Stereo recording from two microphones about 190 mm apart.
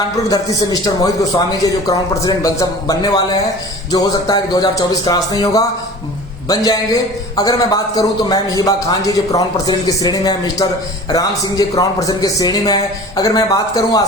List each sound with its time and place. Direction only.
0.3 s a man's voice: 20° left (ahead or behind)